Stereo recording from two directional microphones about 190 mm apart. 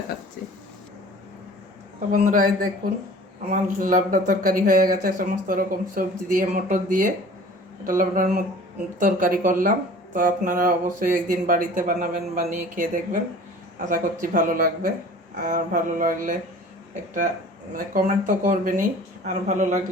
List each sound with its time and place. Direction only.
2.1 s speech: 45° right (ahead or behind)
17.9 s speech: 40° right (ahead or behind)